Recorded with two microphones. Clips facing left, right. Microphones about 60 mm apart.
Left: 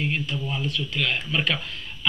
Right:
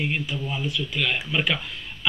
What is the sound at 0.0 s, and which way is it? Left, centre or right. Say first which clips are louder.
Speech: even; centre.